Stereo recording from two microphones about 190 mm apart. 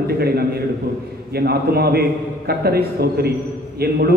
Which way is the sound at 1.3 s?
55° right (ahead or behind).